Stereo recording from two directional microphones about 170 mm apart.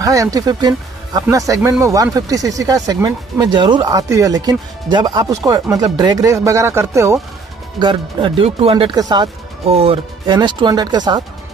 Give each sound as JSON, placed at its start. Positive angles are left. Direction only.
{"t": 0.0, "sound": "speech", "side_deg": -20}
{"t": 7.8, "sound": "speech", "side_deg": -30}